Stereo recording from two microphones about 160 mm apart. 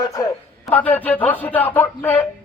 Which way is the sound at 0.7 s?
10° left (ahead or behind).